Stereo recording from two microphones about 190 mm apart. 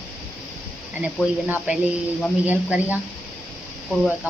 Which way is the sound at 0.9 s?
5° right (ahead or behind).